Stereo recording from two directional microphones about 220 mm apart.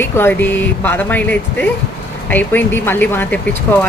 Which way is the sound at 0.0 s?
10° left (ahead or behind).